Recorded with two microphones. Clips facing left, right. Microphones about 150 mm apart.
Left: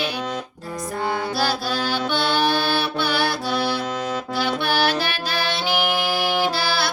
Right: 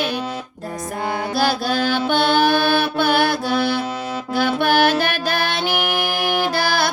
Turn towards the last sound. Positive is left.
turn(degrees=-50)  # may be behind; listen again after turning